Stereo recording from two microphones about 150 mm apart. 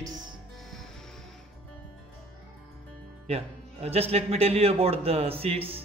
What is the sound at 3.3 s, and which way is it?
A man's voice, 45° right (ahead or behind).